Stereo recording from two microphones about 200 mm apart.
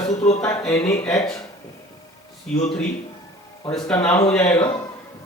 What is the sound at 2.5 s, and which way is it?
Speech, 5° left (ahead or behind).